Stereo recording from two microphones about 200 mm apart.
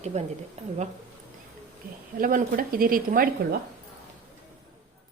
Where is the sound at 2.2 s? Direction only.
45° right (ahead or behind).